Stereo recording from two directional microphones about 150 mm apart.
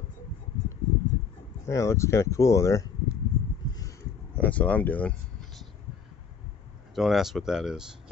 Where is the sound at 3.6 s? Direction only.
25° left (ahead or behind).